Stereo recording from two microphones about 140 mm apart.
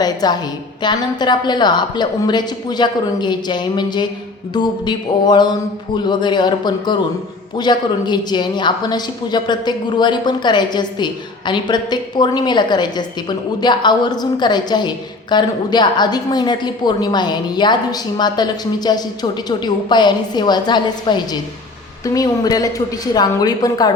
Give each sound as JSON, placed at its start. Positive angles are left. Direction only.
{"t": 0.0, "sound": "a woman's voice", "side_deg": 30}